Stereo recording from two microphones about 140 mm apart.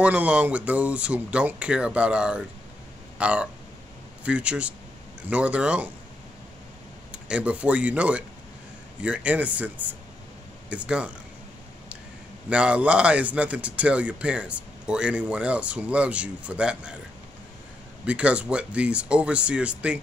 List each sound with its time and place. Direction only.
0.0 s a man's voice: 10° right (ahead or behind)
3.2 s a sound: 10° right (ahead or behind)
4.2 s a man's voice: 10° right (ahead or behind)
7.1 s a man's voice: 10° right (ahead or behind)
12.4 s a man's voice: 10° right (ahead or behind)
18.0 s a man's voice: 10° right (ahead or behind)